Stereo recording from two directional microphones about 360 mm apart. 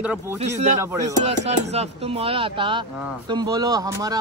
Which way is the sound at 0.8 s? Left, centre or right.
Centre.